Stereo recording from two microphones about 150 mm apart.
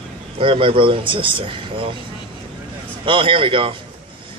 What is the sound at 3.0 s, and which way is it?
Speech, 35° right (ahead or behind).